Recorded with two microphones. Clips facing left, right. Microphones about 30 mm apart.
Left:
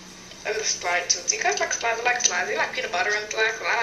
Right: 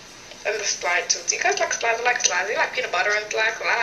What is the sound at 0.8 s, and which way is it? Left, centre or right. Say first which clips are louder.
Speech: right 2 dB; centre.